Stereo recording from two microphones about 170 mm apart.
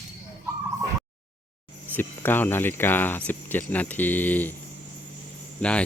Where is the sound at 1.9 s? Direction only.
10° left (ahead or behind).